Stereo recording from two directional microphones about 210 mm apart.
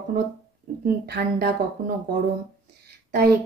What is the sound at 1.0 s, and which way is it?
Speech, 50° right (ahead or behind).